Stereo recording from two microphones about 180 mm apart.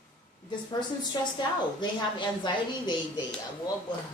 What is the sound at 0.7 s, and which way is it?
A woman's voice, 25° left (ahead or behind).